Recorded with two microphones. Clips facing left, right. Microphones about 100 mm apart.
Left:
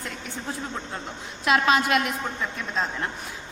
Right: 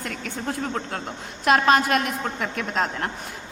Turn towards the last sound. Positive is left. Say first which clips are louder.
# right 3 dB
turn(degrees=-70)  # may be behind; listen again after turning